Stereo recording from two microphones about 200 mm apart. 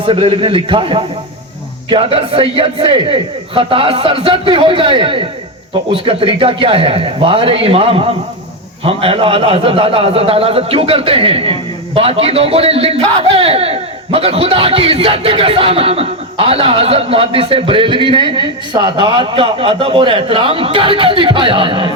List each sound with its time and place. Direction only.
0.0 s a man's voice: 25° right (ahead or behind)